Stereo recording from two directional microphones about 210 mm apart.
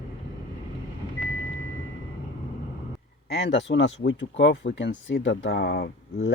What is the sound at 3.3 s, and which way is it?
Speech, 55° left (ahead or behind).